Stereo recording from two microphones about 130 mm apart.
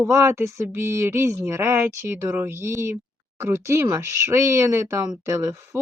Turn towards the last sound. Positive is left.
turn(degrees=-25)  # may be behind; listen again after turning